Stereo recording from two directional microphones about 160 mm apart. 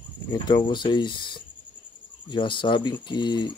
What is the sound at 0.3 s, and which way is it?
Speech, 25° left (ahead or behind).